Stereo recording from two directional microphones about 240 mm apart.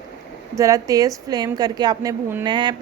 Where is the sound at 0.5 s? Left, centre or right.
Centre.